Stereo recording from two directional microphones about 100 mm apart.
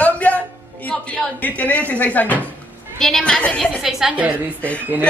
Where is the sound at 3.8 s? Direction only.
5° right (ahead or behind).